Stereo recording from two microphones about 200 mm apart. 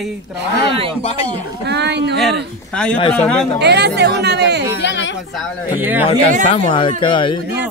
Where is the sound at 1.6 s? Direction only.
55° right (ahead or behind).